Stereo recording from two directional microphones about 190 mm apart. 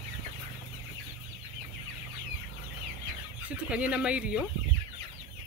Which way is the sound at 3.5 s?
5° right (ahead or behind).